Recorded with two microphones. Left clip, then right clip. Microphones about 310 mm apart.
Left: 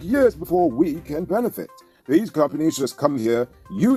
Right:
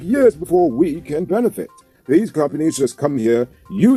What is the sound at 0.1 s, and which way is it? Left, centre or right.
Speech, left.